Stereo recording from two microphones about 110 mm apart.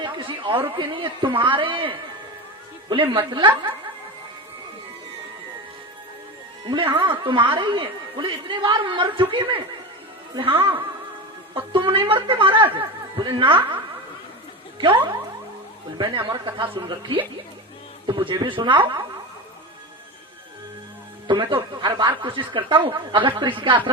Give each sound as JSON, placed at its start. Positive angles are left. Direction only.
{"t": 0.0, "sound": "a woman's voice", "side_deg": -50}
{"t": 6.7, "sound": "a woman's voice", "side_deg": -50}
{"t": 16.0, "sound": "a woman's voice", "side_deg": -45}
{"t": 21.2, "sound": "a woman's voice", "side_deg": -45}